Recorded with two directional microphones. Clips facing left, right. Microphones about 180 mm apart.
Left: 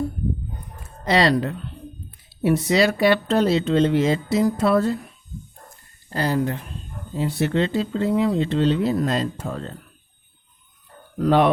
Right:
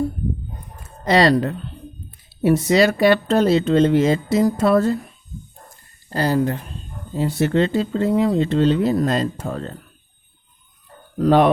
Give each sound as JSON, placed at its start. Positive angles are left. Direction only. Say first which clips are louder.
{"t": 1.0, "sound": "speech", "louder": "right 3 dB", "side_deg": -40}
{"t": 6.1, "sound": "speech", "louder": "right 3 dB", "side_deg": -35}
{"t": 11.2, "sound": "speech", "louder": "right 3 dB", "side_deg": -40}